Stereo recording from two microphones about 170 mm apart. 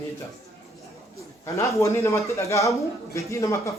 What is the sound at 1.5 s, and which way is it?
A man's voice, 15° left (ahead or behind).